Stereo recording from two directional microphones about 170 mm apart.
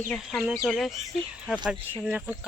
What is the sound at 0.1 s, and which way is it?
Speech, centre (ahead or behind).